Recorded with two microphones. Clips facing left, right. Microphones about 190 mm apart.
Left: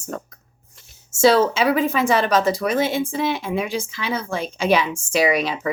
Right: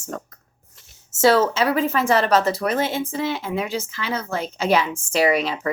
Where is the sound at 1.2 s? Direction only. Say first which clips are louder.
Left 1 dB; 15° left (ahead or behind).